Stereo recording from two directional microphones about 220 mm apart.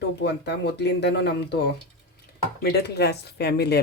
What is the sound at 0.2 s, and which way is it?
Speech, 50° left (ahead or behind).